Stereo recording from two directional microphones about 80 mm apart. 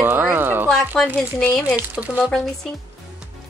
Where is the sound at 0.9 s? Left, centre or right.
Centre.